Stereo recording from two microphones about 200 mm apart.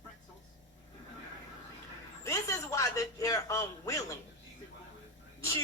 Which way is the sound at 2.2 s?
15° left (ahead or behind).